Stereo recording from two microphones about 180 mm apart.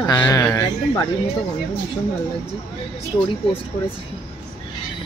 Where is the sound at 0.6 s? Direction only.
20° left (ahead or behind).